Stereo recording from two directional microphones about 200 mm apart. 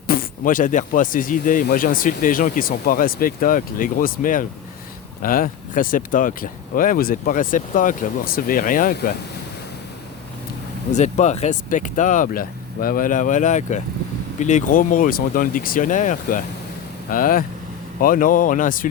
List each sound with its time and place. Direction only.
0.1 s speech: 45° left (ahead or behind)
10.9 s speech: 35° left (ahead or behind)